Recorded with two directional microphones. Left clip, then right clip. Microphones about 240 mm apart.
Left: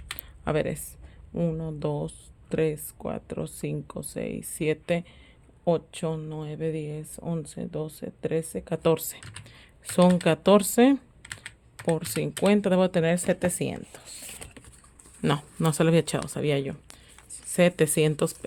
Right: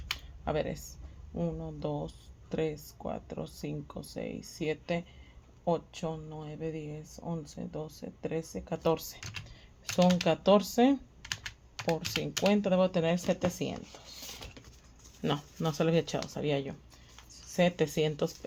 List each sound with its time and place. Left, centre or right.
0.4 s speech: left
11.2 s computer keyboard: centre
12.2 s speech: left
15.2 s speech: left